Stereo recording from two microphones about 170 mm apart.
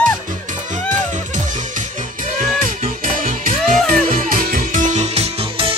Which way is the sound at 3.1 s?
55° right (ahead or behind).